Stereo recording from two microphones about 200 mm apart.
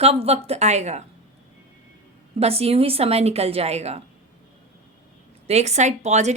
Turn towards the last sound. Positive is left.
turn(degrees=-35)  # may be behind; listen again after turning